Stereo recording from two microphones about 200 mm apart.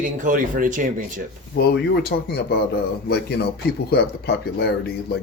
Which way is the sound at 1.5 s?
55° left (ahead or behind).